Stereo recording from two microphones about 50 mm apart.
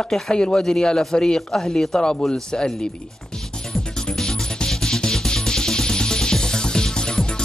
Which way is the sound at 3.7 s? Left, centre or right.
Centre.